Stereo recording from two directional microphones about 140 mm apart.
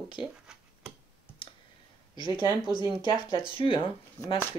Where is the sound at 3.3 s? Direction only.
40° left (ahead or behind).